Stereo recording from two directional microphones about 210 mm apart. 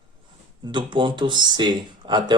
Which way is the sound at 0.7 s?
25° right (ahead or behind).